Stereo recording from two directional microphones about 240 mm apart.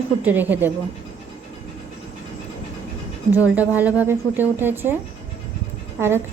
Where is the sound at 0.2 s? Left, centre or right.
Centre.